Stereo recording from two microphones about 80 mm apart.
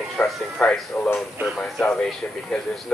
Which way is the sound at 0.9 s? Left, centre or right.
Left.